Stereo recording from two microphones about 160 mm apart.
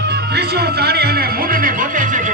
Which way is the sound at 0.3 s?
80° right.